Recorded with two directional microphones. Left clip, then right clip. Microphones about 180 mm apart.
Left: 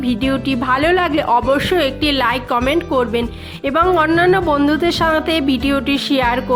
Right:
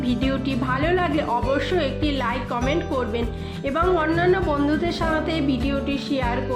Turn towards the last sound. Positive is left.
turn(degrees=30)  # may be behind; listen again after turning